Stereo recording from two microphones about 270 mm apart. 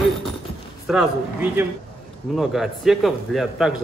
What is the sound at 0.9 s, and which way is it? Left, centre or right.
A man's voice, centre.